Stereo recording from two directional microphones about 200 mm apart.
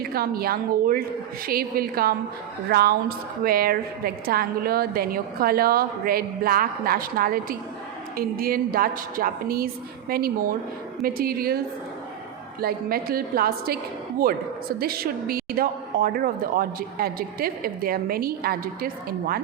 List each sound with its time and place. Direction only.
0.1 s a woman's voice: 50° right (ahead or behind)
12.5 s a woman's voice: 50° right (ahead or behind)
14.8 s a woman's voice: 50° right (ahead or behind)